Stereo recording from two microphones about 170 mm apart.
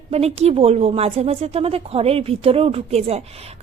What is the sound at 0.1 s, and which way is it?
Speech, 40° right (ahead or behind).